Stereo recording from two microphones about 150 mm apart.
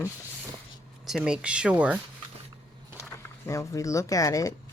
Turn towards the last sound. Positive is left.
turn(degrees=20)  # may be behind; listen again after turning